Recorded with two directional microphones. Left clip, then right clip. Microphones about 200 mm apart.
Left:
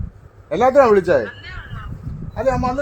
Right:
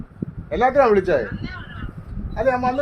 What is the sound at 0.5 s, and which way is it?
Speech, 35° left (ahead or behind).